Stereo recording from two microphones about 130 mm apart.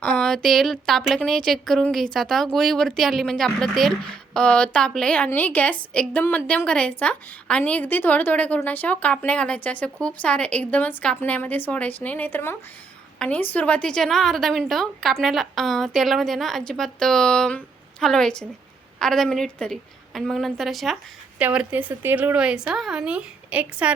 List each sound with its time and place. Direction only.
0.0 s a woman's voice: 5° left (ahead or behind); by 23.9 s 10° right (ahead or behind)